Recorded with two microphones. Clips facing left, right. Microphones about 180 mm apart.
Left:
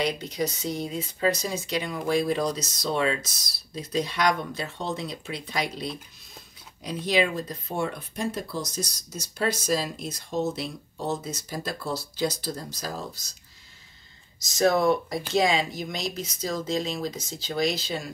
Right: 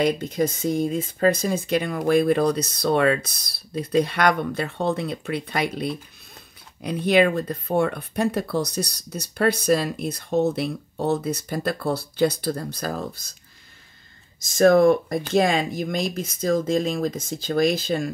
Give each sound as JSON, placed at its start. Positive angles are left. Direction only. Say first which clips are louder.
{"t": 0.0, "sound": "speech", "louder": "right 6 dB", "side_deg": -50}
{"t": 14.4, "sound": "speech", "louder": "right 7 dB", "side_deg": -55}